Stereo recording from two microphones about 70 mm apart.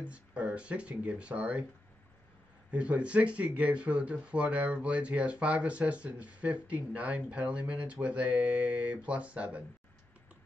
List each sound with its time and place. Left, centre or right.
0.0 s speech: centre
2.7 s speech: centre